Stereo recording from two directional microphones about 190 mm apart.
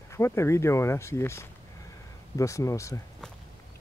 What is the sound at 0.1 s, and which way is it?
Speech, 15° left (ahead or behind).